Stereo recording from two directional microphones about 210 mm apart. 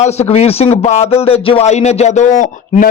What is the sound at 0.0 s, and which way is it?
A man's voice, 30° left (ahead or behind).